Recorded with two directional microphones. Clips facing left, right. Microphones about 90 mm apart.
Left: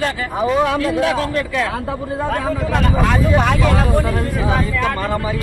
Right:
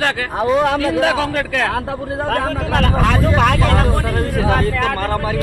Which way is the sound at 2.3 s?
85° right.